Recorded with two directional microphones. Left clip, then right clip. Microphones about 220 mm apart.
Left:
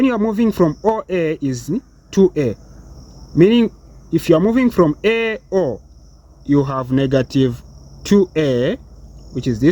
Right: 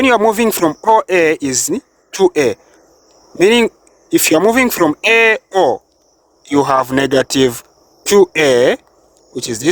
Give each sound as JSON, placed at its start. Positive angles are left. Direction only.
{"t": 0.0, "sound": "speech", "side_deg": -55}